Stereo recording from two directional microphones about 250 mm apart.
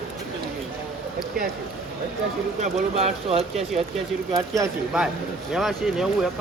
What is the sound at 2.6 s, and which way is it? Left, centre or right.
Speech, right.